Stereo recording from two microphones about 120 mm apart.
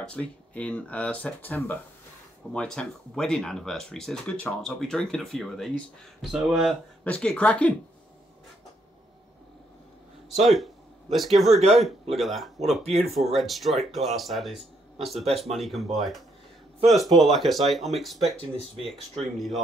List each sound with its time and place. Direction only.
0.0 s speech: 10° left (ahead or behind)
2.5 s speech: 5° left (ahead or behind)
10.4 s a man's voice: centre (ahead or behind)
12.8 s speech: 60° right (ahead or behind)
13.4 s speech: centre (ahead or behind)
19.3 s speech: centre (ahead or behind)